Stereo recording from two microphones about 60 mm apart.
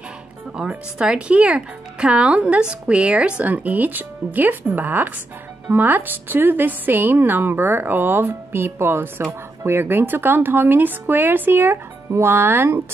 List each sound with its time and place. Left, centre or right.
0.7 s a woman's voice: centre; by 12.8 s right